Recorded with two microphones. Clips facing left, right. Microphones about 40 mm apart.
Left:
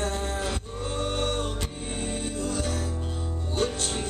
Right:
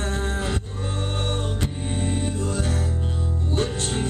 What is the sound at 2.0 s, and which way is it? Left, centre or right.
Music, right.